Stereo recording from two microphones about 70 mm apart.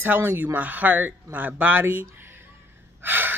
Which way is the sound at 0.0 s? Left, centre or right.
Right.